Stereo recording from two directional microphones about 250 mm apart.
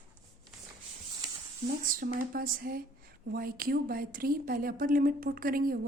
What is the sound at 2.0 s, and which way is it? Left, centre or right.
A woman's voice, right.